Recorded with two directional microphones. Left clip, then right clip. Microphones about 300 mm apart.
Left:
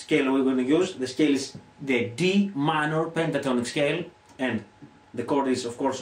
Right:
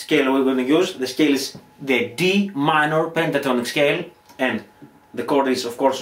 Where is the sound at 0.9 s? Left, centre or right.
Centre.